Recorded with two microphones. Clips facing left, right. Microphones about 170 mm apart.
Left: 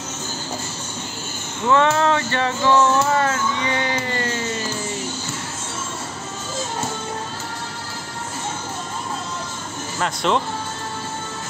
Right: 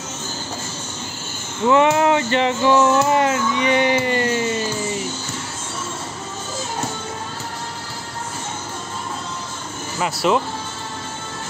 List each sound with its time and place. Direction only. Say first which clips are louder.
1.7 s speech: right 2 dB; 15° right (ahead or behind)
9.9 s speech: right 2 dB; 5° right (ahead or behind)